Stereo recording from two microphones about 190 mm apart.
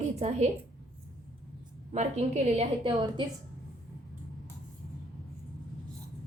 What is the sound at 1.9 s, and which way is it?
A woman's voice, 35° right (ahead or behind).